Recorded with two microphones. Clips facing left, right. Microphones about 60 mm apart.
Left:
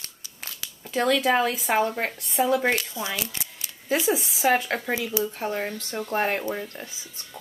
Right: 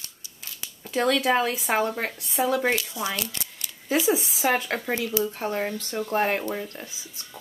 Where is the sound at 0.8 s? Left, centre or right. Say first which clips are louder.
Even; centre.